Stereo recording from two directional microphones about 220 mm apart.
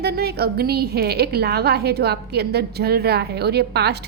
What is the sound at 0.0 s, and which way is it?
A woman's voice, 45° right (ahead or behind).